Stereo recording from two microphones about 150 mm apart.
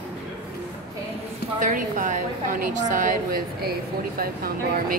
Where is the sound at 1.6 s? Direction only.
60° right (ahead or behind).